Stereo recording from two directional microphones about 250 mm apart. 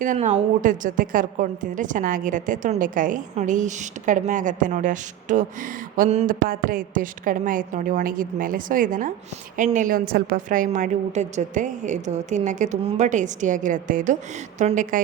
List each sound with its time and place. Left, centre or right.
0.0 s a woman's voice: right